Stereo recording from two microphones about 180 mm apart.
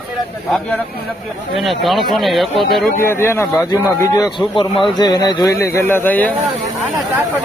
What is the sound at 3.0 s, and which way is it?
Speech, 15° left (ahead or behind).